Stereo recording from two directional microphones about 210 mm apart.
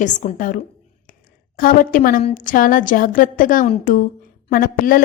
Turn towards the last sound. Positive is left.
turn(degrees=45)  # may be behind; listen again after turning